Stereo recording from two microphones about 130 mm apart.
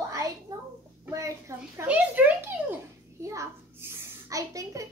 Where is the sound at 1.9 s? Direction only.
15° right (ahead or behind).